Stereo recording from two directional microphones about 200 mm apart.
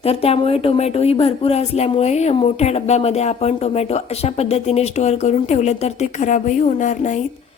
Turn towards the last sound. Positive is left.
turn(degrees=35)  # may be behind; listen again after turning